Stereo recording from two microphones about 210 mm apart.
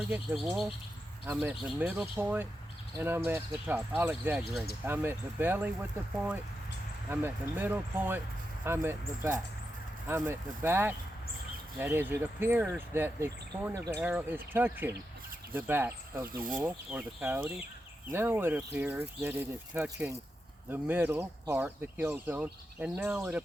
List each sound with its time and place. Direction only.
1.3 s speech: 5° right (ahead or behind)
7.1 s speech: 10° right (ahead or behind)
16.3 s speech: 40° right (ahead or behind)
16.6 s speech: 10° right (ahead or behind)